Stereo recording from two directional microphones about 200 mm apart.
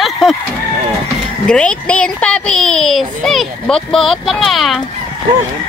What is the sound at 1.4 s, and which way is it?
Speech, 5° left (ahead or behind).